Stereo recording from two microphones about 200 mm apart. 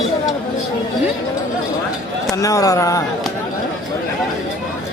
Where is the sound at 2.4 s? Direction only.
15° left (ahead or behind).